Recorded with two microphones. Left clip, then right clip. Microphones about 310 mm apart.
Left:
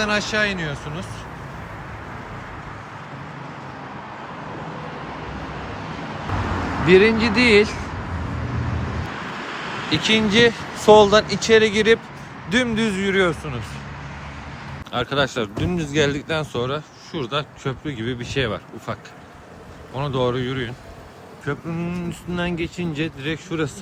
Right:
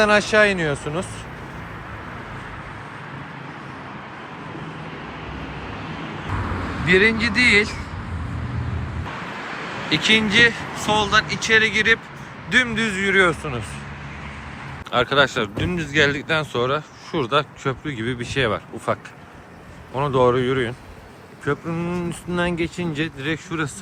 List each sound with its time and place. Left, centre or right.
0.0 s speech: centre
6.8 s speech: centre
9.9 s speech: centre
14.8 s speech: centre
20.0 s speech: centre